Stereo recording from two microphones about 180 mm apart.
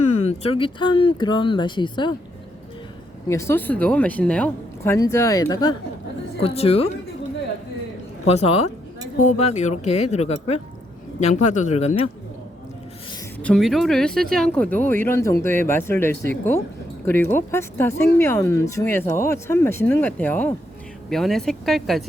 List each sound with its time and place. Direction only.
0.3 s speech: 30° left (ahead or behind)
3.2 s speech: 15° left (ahead or behind)
6.4 s speech: 35° left (ahead or behind)
8.3 s speech: 35° left (ahead or behind)
13.4 s speech: centre (ahead or behind)